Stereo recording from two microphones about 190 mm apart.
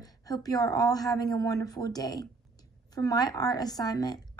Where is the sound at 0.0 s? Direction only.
20° left (ahead or behind).